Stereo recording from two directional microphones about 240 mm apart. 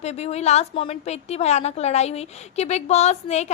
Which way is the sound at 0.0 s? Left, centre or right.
Left.